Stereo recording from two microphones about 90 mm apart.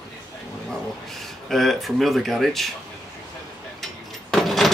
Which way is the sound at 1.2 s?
5° left (ahead or behind).